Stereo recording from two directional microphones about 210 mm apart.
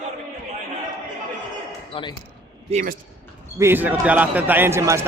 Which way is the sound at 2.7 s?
35° right (ahead or behind).